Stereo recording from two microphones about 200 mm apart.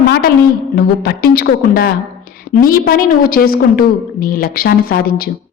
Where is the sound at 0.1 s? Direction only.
50° left (ahead or behind).